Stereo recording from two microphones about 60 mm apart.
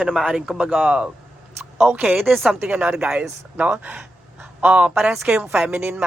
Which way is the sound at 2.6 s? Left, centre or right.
Right.